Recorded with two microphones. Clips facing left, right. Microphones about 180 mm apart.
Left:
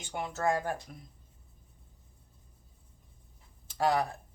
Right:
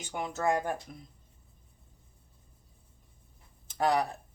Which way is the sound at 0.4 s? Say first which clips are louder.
Right 1 dB; 15° right (ahead or behind).